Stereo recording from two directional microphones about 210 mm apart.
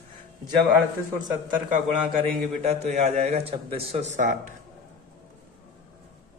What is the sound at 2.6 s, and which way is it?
Speech, 30° right (ahead or behind).